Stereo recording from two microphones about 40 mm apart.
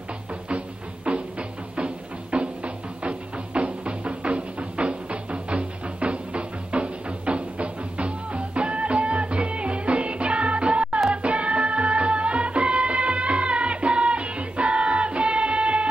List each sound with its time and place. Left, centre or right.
2.3 s music: right